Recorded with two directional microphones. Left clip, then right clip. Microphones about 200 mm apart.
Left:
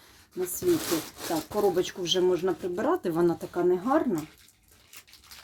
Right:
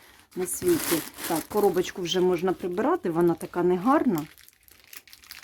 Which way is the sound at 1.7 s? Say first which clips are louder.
Even; 25° right (ahead or behind).